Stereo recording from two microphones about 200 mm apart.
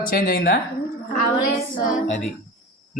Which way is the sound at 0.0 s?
45° left (ahead or behind).